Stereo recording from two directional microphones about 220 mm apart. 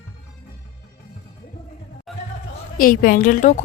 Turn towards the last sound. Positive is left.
turn(degrees=35)  # may be behind; listen again after turning